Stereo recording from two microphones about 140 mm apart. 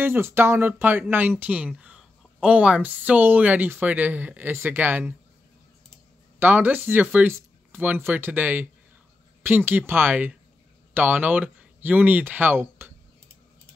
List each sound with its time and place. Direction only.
0.0 s a woman's voice: 15° right (ahead or behind)
6.4 s a woman's voice: 15° right (ahead or behind)